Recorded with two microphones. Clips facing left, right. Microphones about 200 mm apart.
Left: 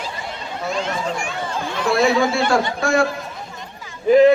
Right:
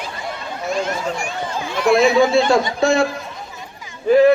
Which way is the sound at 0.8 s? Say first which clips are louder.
Right 1 dB; 40° right (ahead or behind).